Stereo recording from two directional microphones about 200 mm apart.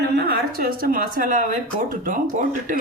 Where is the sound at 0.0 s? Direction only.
55° right (ahead or behind).